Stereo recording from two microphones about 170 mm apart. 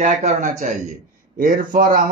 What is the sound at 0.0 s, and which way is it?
Speech, 45° right (ahead or behind).